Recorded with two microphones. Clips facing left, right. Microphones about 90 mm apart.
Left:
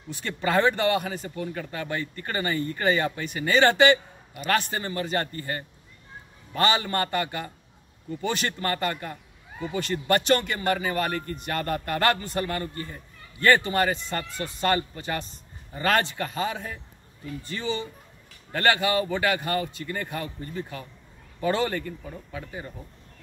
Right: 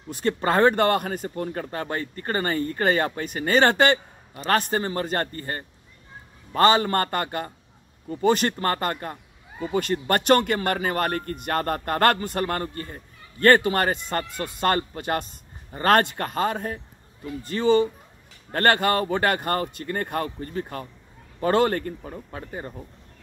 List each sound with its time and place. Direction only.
0.1 s a man's voice: 40° right (ahead or behind)